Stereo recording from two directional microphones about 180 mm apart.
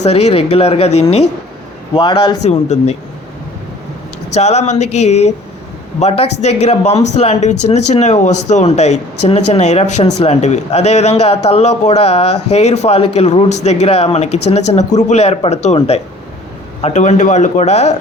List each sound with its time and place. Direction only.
0.0 s a man's voice: 35° left (ahead or behind)
2.0 s a man's voice: 25° left (ahead or behind)
2.4 s a man's voice: 40° left (ahead or behind)
4.4 s a man's voice: 40° left (ahead or behind)